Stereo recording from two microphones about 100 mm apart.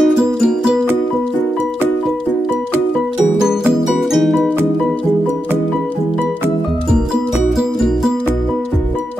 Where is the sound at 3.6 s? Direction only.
Centre (ahead or behind).